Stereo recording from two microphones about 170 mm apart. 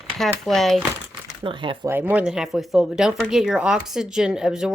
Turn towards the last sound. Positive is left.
turn(degrees=-5)  # may be behind; listen again after turning